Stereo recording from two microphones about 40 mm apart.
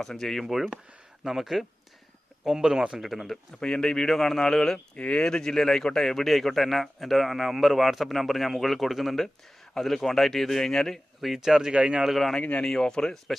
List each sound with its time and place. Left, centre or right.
0.0 s speech: centre
1.2 s speech: centre
3.6 s speech: centre
4.9 s speech: left
5.2 s speech: centre
11.3 s speech: centre
11.7 s speech: right
12.0 s speech: centre
12.4 s speech: left
12.6 s speech: centre